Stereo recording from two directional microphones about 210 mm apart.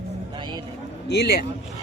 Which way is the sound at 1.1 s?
50° left (ahead or behind).